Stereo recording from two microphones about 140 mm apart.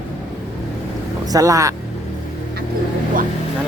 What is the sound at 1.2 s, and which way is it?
Speech, 25° right (ahead or behind).